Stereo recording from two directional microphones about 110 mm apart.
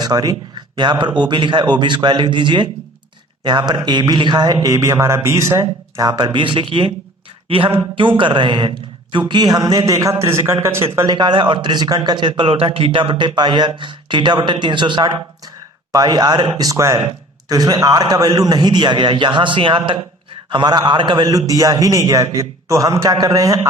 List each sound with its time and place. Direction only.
0.0 s a man's voice: 35° right (ahead or behind)
6.1 s a man's voice: 40° right (ahead or behind); by 11.0 s 25° right (ahead or behind)
11.0 s a man's voice: 40° right (ahead or behind)